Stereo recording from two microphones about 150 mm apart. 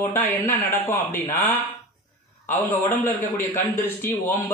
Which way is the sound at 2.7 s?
15° left (ahead or behind).